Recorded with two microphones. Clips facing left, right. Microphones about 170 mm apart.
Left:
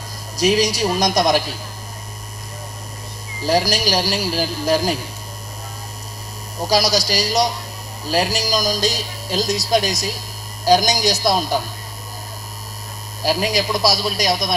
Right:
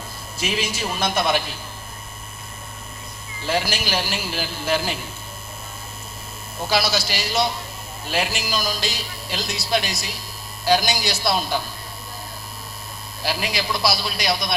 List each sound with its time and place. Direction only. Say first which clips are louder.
0.3 s speech: left 9 dB; 40° left (ahead or behind)
3.4 s speech: left 6 dB; 40° left (ahead or behind)
6.6 s speech: left 4 dB; 40° left (ahead or behind)
13.2 s speech: left 6 dB; 40° left (ahead or behind)